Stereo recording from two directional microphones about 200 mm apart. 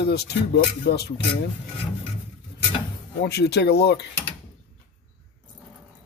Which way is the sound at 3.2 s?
55° left (ahead or behind).